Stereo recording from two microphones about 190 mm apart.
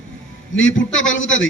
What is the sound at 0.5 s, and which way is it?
Speech, 90° left.